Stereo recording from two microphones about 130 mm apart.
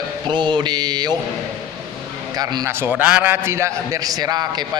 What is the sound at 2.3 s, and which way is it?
Speech, 30° right (ahead or behind).